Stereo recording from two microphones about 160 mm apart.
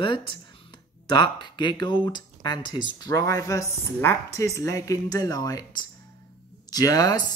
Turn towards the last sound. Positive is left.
turn(degrees=25)  # may be behind; listen again after turning